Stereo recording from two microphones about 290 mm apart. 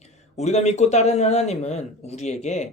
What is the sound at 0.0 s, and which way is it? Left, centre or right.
Speech, left.